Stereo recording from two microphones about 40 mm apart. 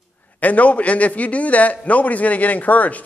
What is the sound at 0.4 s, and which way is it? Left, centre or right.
Speech, left.